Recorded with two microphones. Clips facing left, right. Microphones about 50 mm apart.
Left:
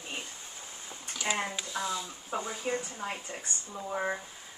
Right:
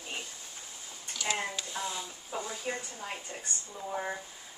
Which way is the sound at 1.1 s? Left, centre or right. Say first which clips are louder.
Left 1 dB; left.